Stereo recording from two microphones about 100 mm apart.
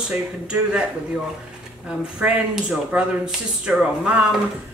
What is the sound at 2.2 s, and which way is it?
Speech, 10° right (ahead or behind).